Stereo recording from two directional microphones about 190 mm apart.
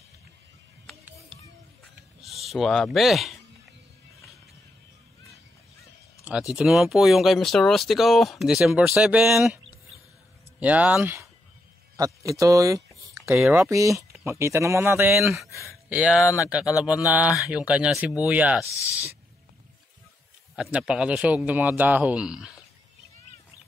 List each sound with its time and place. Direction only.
0.8 s music: 5° right (ahead or behind)
2.4 s speech: centre (ahead or behind)
6.5 s speech: centre (ahead or behind)
10.6 s speech: 10° right (ahead or behind)
12.4 s speech: 15° right (ahead or behind)
20.7 s speech: 5° right (ahead or behind)